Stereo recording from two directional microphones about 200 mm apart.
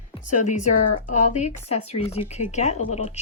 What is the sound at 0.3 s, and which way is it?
Speech, 35° left (ahead or behind).